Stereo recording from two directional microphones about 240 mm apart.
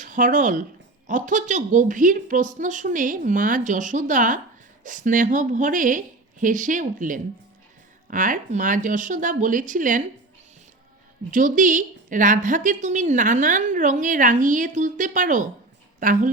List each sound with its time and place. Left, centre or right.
0.0 s a woman's voice: right
11.3 s a woman's voice: right